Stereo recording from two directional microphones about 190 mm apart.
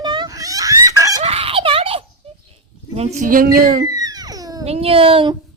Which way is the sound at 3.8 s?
20° right (ahead or behind).